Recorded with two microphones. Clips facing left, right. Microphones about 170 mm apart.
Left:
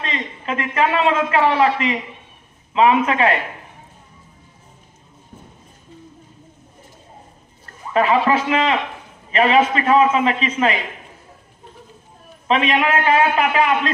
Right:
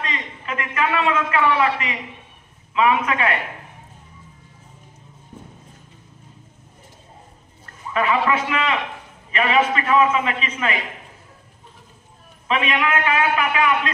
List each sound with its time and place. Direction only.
0.0 s a man's voice: 30° left (ahead or behind)
7.9 s a man's voice: 30° left (ahead or behind)
12.4 s a man's voice: 35° left (ahead or behind)